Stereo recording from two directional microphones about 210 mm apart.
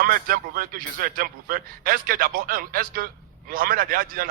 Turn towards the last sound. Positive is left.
turn(degrees=-45)  # may be behind; listen again after turning